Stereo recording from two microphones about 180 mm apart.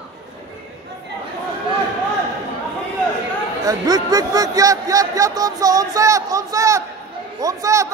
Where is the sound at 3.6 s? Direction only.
20° right (ahead or behind).